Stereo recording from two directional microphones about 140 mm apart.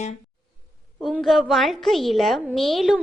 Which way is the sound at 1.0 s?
Centre (ahead or behind).